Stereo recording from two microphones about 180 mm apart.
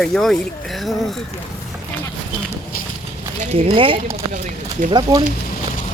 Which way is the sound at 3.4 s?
35° right (ahead or behind).